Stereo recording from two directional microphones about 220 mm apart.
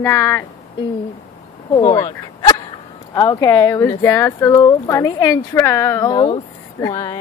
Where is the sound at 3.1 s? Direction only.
15° left (ahead or behind).